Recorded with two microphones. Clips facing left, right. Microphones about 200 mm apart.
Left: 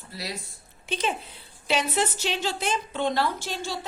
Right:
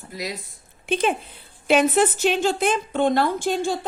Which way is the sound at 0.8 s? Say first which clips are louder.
Right 7 dB; 55° right (ahead or behind).